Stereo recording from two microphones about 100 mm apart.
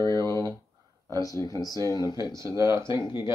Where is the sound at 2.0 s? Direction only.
30° right (ahead or behind).